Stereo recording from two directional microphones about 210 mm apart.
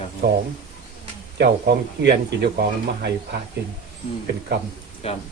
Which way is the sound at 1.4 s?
50° right (ahead or behind).